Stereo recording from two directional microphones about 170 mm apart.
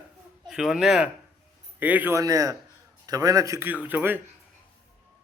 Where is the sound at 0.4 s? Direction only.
5° right (ahead or behind).